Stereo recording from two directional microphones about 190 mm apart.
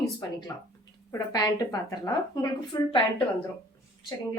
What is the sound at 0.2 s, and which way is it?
A woman's voice, 20° left (ahead or behind).